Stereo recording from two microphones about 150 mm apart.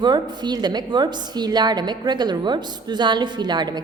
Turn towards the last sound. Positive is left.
turn(degrees=-30)  # may be behind; listen again after turning